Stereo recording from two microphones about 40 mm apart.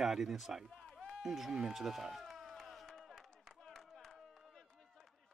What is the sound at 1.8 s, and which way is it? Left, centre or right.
Speech, centre.